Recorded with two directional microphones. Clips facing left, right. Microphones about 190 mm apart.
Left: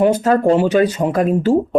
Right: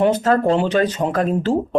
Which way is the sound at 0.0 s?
10° left (ahead or behind).